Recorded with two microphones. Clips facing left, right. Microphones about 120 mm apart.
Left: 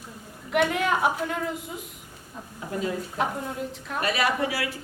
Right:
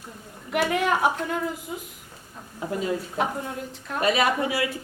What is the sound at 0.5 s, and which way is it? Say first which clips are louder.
A woman's voice: even; centre (ahead or behind).